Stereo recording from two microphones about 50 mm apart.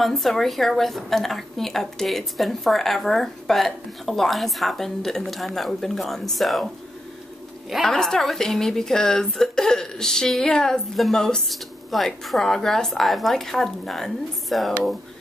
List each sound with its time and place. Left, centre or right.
0.0 s a woman's voice: centre
7.8 s a woman's voice: centre